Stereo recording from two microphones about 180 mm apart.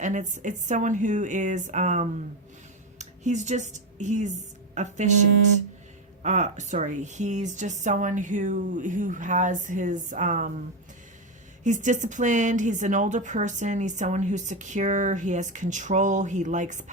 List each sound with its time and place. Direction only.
0.0 s a woman's voice: 45° right (ahead or behind)
6.2 s a woman's voice: 40° right (ahead or behind)
11.6 s a woman's voice: 45° right (ahead or behind)